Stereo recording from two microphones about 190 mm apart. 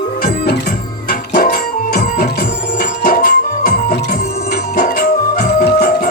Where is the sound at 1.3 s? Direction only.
55° left (ahead or behind).